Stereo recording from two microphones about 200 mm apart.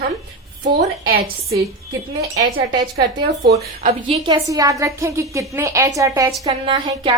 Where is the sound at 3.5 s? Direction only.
30° right (ahead or behind).